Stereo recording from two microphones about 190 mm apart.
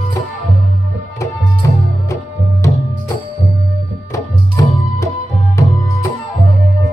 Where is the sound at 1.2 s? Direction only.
15° left (ahead or behind).